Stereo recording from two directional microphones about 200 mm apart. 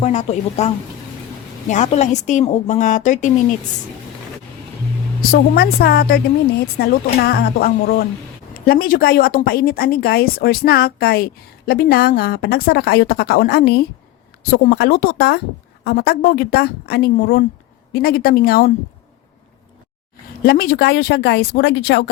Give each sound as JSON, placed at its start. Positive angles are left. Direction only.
{"t": 0.0, "sound": "a woman's voice", "side_deg": 35}
{"t": 5.3, "sound": "speech", "side_deg": 50}
{"t": 20.4, "sound": "speech", "side_deg": 50}